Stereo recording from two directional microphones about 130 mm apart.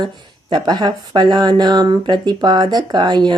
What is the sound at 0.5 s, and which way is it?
Speech, 35° right (ahead or behind).